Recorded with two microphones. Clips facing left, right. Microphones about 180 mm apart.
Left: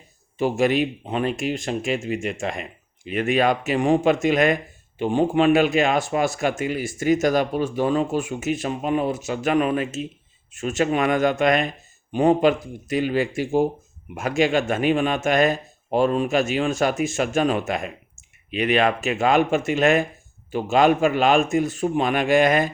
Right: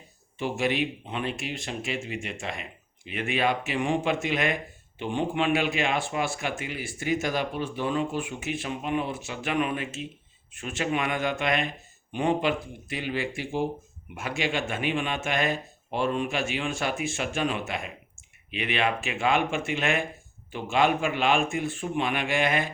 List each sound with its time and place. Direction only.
0.3 s speech: 40° left (ahead or behind)